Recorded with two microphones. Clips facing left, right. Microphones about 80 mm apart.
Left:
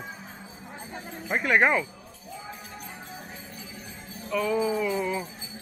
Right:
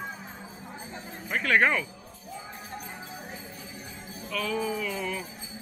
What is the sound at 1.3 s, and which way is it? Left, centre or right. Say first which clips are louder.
Jingle bell: left 2 dB; centre.